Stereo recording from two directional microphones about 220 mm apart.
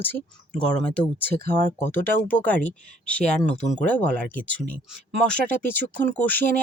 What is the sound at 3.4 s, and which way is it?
Speech, 30° left (ahead or behind).